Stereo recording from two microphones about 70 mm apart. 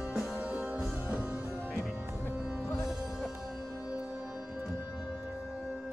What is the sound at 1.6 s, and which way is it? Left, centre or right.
Music, centre.